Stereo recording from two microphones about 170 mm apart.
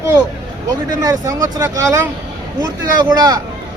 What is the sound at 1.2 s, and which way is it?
Speech, 20° right (ahead or behind).